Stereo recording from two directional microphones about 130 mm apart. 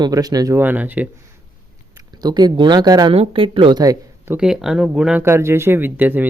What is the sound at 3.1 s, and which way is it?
Speech, 45° right (ahead or behind).